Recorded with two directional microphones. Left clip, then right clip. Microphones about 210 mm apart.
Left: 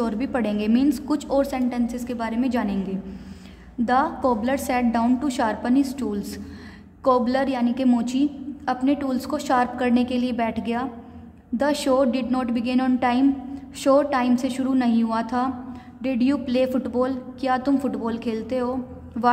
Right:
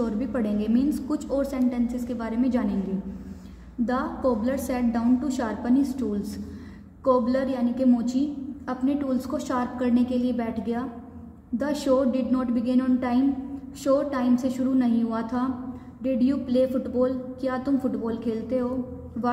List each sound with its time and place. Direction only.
0.0 s a woman's voice: 35° left (ahead or behind)
3.8 s a woman's voice: 40° left (ahead or behind)